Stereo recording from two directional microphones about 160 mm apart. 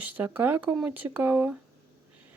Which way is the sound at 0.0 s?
10° right (ahead or behind).